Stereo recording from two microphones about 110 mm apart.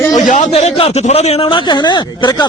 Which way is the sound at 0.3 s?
90° left.